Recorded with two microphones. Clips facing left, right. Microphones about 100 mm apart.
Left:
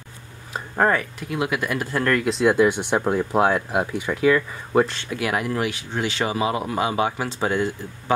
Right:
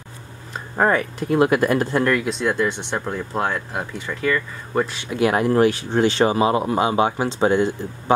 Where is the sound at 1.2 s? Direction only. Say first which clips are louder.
Right 8 dB; 45° right (ahead or behind).